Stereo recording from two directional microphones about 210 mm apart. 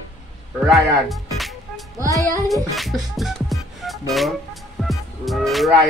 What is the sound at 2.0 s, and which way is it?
Music, 15° right (ahead or behind).